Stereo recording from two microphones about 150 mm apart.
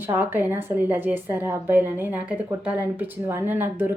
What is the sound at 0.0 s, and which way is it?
A woman's voice, 15° right (ahead or behind).